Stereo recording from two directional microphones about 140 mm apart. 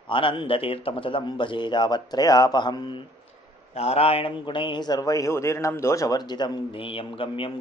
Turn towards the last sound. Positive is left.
turn(degrees=40)  # may be behind; listen again after turning